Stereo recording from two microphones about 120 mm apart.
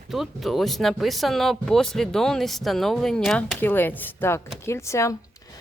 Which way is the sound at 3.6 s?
15° left (ahead or behind).